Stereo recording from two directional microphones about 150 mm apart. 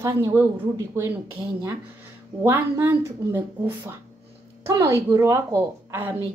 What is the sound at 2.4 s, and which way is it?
A woman's voice, 15° right (ahead or behind).